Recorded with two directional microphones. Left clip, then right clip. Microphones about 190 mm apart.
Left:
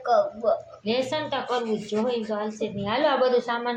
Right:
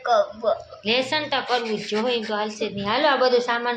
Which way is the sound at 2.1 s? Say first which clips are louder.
Right 3 dB; 15° right (ahead or behind).